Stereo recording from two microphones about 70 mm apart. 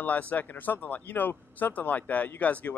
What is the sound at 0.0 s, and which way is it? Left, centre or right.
Speech, left.